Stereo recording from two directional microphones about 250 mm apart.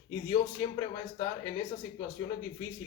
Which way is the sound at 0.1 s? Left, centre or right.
Centre.